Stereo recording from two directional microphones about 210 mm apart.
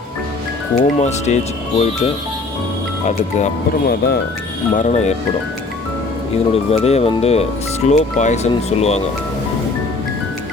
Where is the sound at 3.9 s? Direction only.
45° left (ahead or behind).